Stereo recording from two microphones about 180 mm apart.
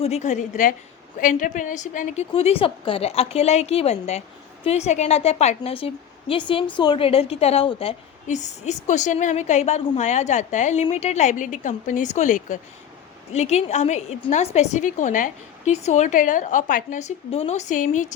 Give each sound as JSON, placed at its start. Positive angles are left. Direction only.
{"t": 0.0, "sound": "a woman's voice", "side_deg": 40}
{"t": 2.3, "sound": "a woman's voice", "side_deg": 30}